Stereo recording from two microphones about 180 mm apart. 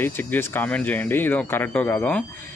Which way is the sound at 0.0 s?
10° left (ahead or behind).